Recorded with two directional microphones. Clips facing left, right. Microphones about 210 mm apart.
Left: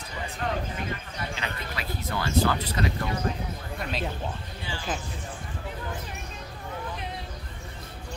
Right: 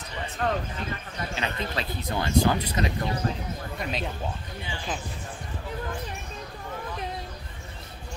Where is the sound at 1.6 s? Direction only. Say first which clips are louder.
Right 3 dB; 20° right (ahead or behind).